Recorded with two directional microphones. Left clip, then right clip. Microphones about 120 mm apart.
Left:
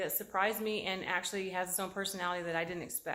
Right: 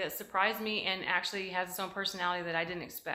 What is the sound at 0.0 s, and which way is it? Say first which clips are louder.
A woman's voice: right 2 dB; 40° left (ahead or behind).